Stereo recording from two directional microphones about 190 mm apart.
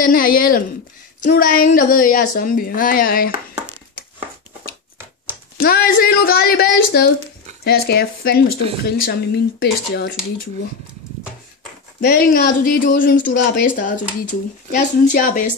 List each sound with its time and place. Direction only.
0.0 s a woman's voice: 50° left (ahead or behind)
5.6 s a woman's voice: 50° left (ahead or behind)
12.0 s a woman's voice: 55° left (ahead or behind)